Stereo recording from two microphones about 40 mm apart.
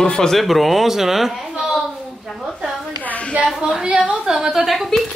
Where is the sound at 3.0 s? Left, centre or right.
Left.